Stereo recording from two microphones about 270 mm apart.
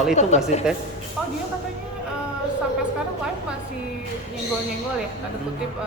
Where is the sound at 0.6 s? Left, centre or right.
Centre.